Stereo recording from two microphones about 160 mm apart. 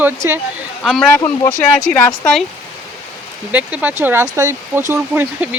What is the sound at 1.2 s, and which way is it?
Speech, 25° left (ahead or behind).